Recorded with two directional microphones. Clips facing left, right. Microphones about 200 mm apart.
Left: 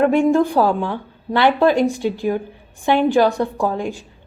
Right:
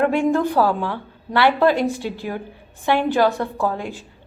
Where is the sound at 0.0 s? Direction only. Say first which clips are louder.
Left 4 dB; 15° left (ahead or behind).